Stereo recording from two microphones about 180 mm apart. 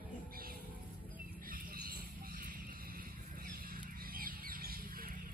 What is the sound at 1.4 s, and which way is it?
Vehicle, 50° right (ahead or behind).